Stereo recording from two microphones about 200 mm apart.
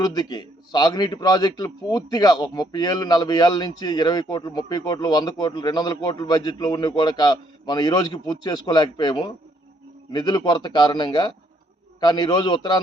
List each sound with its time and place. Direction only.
0.0 s a man's voice: 20° left (ahead or behind)